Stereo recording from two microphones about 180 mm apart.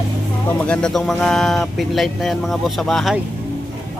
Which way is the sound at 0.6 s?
5° left (ahead or behind).